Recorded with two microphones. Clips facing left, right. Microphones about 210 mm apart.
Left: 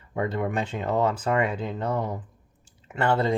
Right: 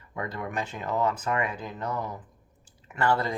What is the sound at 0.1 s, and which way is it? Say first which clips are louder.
Speech: left 7 dB; 30° left (ahead or behind).